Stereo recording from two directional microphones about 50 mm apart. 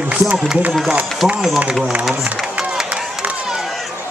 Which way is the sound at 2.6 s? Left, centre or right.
Centre.